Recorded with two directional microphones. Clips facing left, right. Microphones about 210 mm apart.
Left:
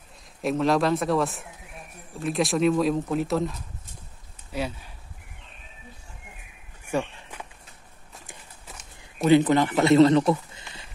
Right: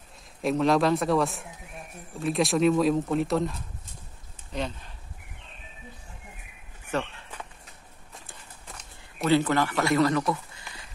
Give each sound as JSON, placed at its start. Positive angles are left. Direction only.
{"t": 0.4, "sound": "speech", "side_deg": 0}
{"t": 6.9, "sound": "walk", "side_deg": 10}
{"t": 9.2, "sound": "speech", "side_deg": 20}